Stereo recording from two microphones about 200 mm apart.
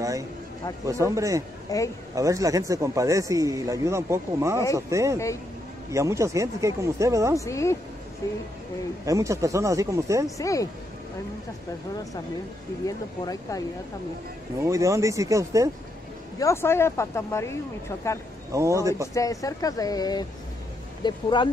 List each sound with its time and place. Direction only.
0.8 s a man's voice: 15° right (ahead or behind)
1.7 s speech: 15° left (ahead or behind)
2.1 s a man's voice: 15° right (ahead or behind)
7.3 s speech: 15° left (ahead or behind)
9.0 s a man's voice: 15° right (ahead or behind)
10.3 s speech: 15° left (ahead or behind)
12.8 s speech: 15° left (ahead or behind)
14.6 s a man's voice: 15° right (ahead or behind)
16.3 s speech: 15° left (ahead or behind)
18.5 s a man's voice: 15° right (ahead or behind)
19.1 s speech: 15° left (ahead or behind)